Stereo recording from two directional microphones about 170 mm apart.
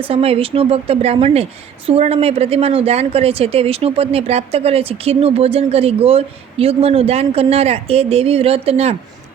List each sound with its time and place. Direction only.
0.1 s a woman's voice: 35° right (ahead or behind)